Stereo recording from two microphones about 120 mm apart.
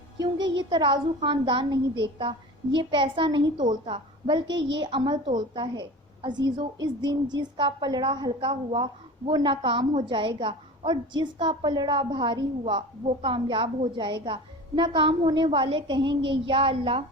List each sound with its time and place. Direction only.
0.2 s a woman's voice: 40° right (ahead or behind)